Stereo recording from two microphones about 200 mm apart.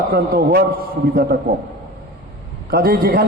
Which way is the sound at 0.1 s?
50° right (ahead or behind).